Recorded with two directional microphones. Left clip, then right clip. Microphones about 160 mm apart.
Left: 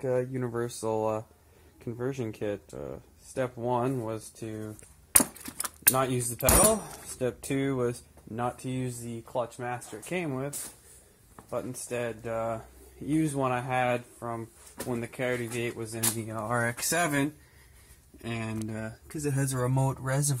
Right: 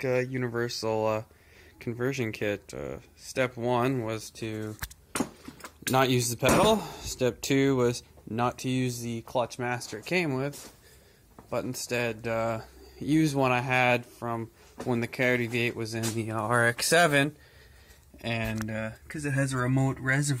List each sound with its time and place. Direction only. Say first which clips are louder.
0.0 s speech: right 1 dB; centre (ahead or behind)
1.8 s speech: right 3 dB; 10° right (ahead or behind)
5.9 s speech: right 7 dB; 40° right (ahead or behind)
11.5 s speech: right 3 dB; 35° right (ahead or behind)
14.9 s speech: right 5 dB; 45° right (ahead or behind)
16.3 s speech: right 6 dB; 20° right (ahead or behind)
18.7 s speech: right 4 dB; centre (ahead or behind)